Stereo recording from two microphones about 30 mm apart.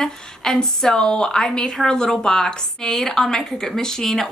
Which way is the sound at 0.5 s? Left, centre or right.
Left.